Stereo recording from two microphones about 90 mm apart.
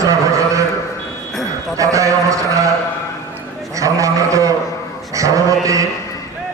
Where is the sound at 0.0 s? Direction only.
40° right (ahead or behind).